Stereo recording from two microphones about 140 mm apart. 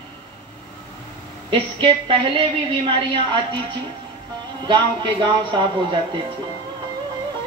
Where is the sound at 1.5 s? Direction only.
40° right (ahead or behind).